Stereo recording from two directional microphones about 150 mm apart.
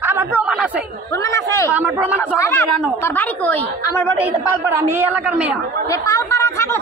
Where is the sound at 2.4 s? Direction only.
15° left (ahead or behind).